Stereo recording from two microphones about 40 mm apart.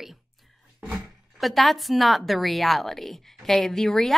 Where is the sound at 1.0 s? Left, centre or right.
Centre.